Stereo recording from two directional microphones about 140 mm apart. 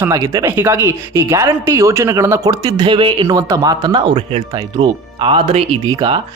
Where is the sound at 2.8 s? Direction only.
35° right (ahead or behind).